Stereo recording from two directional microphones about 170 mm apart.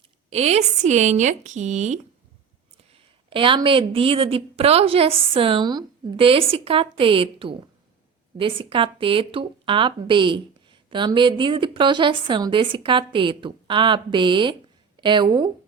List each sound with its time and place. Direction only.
0.3 s speech: 40° right (ahead or behind)
3.2 s a woman's voice: 30° right (ahead or behind)